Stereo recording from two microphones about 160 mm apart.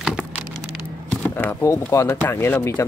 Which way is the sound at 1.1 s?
10° left (ahead or behind).